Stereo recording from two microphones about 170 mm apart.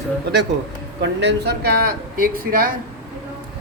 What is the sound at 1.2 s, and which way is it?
Speech, 80° right.